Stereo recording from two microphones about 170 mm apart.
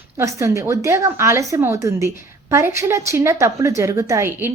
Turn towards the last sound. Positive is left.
turn(degrees=-15)  # may be behind; listen again after turning